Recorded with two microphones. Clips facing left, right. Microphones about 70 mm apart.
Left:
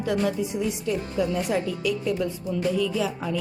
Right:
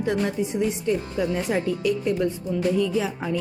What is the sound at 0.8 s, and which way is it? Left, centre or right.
Speech, right.